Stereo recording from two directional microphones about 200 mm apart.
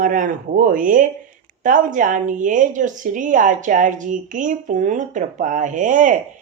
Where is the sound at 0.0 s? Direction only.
40° right (ahead or behind).